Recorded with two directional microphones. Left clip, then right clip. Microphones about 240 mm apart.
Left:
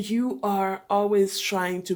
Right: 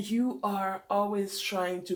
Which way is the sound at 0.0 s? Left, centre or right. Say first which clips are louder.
Left 4 dB; left.